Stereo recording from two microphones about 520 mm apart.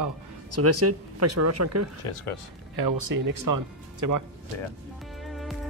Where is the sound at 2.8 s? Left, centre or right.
Right.